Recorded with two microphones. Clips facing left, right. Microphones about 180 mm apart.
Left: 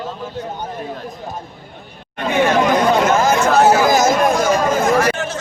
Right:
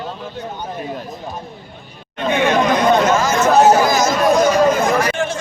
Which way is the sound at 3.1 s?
55° left (ahead or behind).